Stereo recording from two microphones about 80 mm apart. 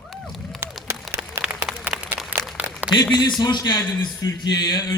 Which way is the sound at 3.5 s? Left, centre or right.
Left.